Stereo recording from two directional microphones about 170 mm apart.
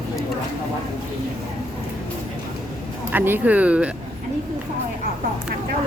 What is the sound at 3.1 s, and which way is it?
Speech, 10° right (ahead or behind).